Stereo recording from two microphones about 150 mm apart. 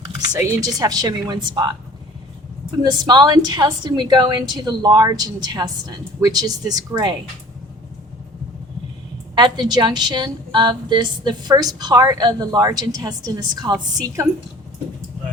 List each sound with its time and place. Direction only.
0.0 s speech: 25° right (ahead or behind)
2.8 s a woman's voice: 25° right (ahead or behind)
9.3 s a woman's voice: 30° right (ahead or behind)